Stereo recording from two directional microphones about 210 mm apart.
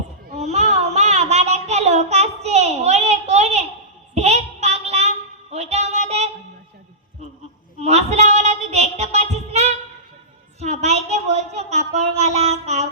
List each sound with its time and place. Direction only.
0.3 s child singing: 30° right (ahead or behind)
7.8 s child singing: 30° right (ahead or behind)
10.6 s a sound: 30° right (ahead or behind)